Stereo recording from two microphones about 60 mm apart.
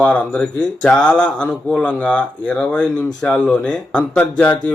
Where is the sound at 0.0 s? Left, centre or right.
Centre.